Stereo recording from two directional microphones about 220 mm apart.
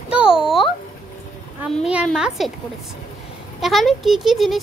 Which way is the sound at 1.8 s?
5° right (ahead or behind).